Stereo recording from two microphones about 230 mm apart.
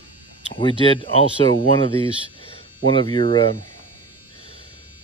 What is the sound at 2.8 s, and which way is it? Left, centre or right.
Speech, left.